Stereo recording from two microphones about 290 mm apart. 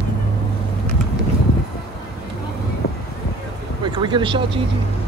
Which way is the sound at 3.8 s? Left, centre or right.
Centre.